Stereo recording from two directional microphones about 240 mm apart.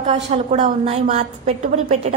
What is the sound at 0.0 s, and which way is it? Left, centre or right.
A woman's voice, right.